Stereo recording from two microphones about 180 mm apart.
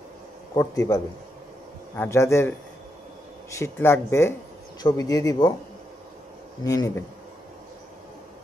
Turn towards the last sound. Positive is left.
turn(degrees=15)  # may be behind; listen again after turning